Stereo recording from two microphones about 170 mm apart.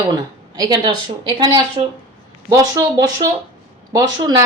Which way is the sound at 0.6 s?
25° right (ahead or behind).